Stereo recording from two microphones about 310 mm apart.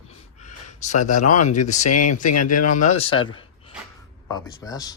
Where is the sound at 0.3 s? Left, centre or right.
Left.